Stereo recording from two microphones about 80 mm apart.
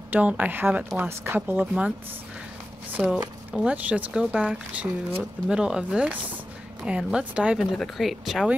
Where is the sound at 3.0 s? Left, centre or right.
Centre.